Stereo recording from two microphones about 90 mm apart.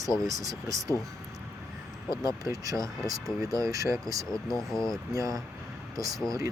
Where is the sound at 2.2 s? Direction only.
40° right (ahead or behind).